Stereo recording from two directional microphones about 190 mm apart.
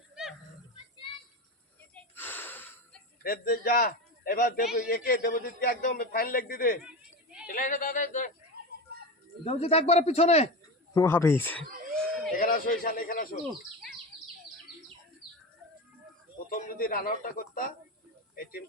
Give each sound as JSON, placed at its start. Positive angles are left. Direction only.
{"t": 2.1, "sound": "wheeze", "side_deg": 10}
{"t": 3.2, "sound": "a man's voice", "side_deg": 50}
{"t": 6.8, "sound": "a sound", "side_deg": -5}
{"t": 7.4, "sound": "a man's voice", "side_deg": 45}
{"t": 8.5, "sound": "a sound", "side_deg": -55}
{"t": 9.4, "sound": "speech", "side_deg": 35}
{"t": 10.9, "sound": "speech", "side_deg": 15}
{"t": 12.3, "sound": "a man's voice", "side_deg": 45}
{"t": 16.5, "sound": "a man's voice", "side_deg": 45}